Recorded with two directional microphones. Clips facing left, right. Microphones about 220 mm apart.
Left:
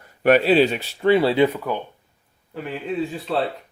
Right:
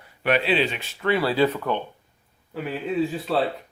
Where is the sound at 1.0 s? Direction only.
25° left (ahead or behind); by 1.8 s 10° left (ahead or behind).